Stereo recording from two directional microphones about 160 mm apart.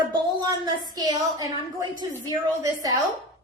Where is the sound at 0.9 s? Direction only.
25° right (ahead or behind).